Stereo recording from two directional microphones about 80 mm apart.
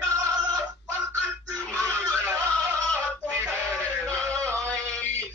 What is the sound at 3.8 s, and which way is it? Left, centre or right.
Chant, centre.